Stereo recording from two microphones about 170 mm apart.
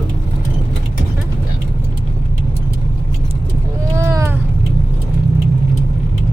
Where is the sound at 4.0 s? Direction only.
15° right (ahead or behind).